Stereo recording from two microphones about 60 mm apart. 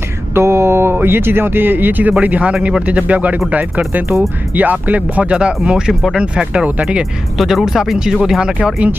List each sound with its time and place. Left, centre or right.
0.3 s speech: right; by 7.1 s centre
7.3 s speech: centre